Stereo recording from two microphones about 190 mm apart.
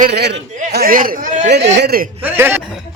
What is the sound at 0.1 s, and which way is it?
A man's voice, 60° right (ahead or behind).